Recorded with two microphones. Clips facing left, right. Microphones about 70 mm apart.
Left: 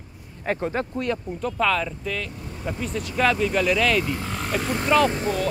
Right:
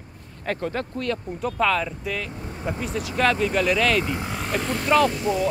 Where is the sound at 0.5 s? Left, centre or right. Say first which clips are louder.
Left 2 dB; centre.